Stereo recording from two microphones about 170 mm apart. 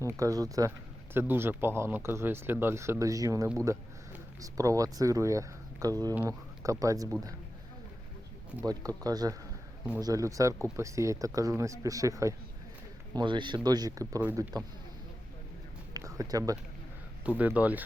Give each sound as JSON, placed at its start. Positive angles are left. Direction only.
{"t": 0.0, "sound": "speech", "side_deg": -20}
{"t": 9.0, "sound": "speech", "side_deg": -20}
{"t": 15.9, "sound": "a sound", "side_deg": -20}
{"t": 17.2, "sound": "speech", "side_deg": -10}